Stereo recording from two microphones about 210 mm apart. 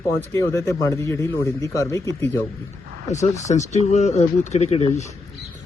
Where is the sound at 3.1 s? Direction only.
35° left (ahead or behind).